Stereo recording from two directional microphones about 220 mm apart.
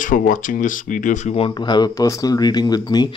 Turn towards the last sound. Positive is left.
turn(degrees=20)  # may be behind; listen again after turning